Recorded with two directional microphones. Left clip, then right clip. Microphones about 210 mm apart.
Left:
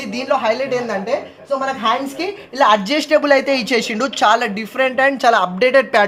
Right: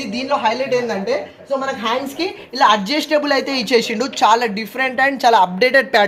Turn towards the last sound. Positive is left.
turn(degrees=10)  # may be behind; listen again after turning